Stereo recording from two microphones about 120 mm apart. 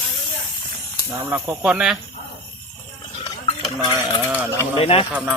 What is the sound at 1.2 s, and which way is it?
Speech, 15° right (ahead or behind).